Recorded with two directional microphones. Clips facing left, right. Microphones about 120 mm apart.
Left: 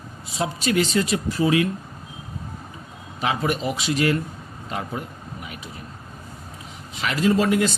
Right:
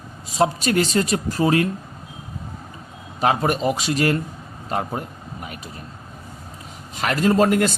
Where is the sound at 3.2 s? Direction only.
45° right (ahead or behind).